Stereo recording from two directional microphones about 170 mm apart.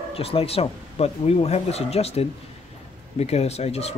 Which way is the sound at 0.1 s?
35° left (ahead or behind).